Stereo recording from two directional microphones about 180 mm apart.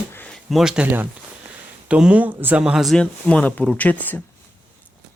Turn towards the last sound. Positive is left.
turn(degrees=10)  # may be behind; listen again after turning